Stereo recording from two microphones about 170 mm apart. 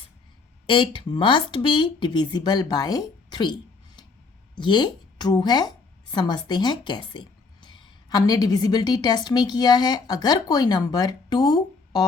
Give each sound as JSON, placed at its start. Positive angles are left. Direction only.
{"t": 0.7, "sound": "speech", "side_deg": 30}
{"t": 4.5, "sound": "a woman's voice", "side_deg": 25}